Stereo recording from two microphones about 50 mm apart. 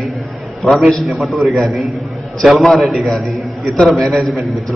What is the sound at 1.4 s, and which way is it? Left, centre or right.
A man's voice, centre.